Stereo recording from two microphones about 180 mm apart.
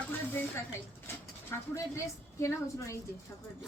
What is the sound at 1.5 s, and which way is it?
A woman's voice, 15° left (ahead or behind).